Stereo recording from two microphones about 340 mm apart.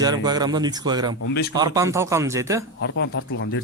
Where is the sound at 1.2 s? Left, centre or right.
Left.